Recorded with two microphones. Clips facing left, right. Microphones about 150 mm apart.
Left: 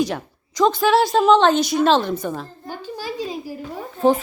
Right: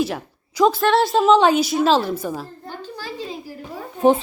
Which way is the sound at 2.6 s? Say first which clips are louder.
Left 3 dB; 10° left (ahead or behind).